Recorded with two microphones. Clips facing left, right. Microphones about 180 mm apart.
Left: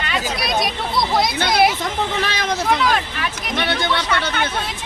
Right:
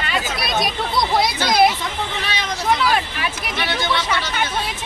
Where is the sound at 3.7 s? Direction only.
55° left (ahead or behind).